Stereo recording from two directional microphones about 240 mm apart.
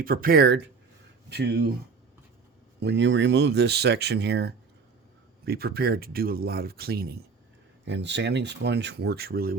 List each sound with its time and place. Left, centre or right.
0.0 s speech: right
2.8 s speech: right